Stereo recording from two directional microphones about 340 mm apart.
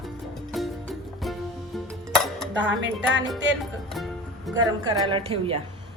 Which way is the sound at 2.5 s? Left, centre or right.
Right.